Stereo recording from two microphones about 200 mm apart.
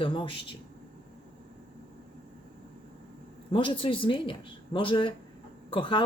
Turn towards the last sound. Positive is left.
turn(degrees=25)  # may be behind; listen again after turning